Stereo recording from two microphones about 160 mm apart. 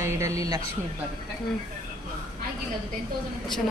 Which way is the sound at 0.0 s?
20° right (ahead or behind).